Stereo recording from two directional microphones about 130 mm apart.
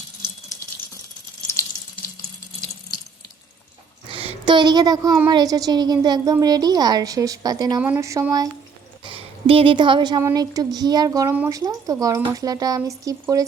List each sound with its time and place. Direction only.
4.1 s a woman's voice: 45° right (ahead or behind); by 7.8 s 30° right (ahead or behind)
7.8 s speech: 15° right (ahead or behind)
9.0 s speech: 45° right (ahead or behind); by 13.4 s 25° right (ahead or behind)